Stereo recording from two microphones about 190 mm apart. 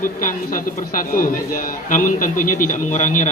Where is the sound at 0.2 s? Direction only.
45° left (ahead or behind).